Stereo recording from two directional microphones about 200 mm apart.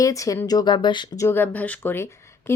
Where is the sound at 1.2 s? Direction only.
10° left (ahead or behind).